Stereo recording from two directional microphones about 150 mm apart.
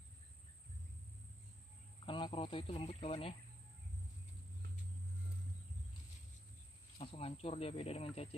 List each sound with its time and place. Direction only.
2.0 s a man's voice: 35° left (ahead or behind)
7.0 s speech: 40° left (ahead or behind)